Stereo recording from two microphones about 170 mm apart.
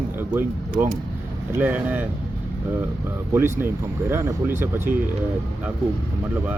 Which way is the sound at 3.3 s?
15° right (ahead or behind).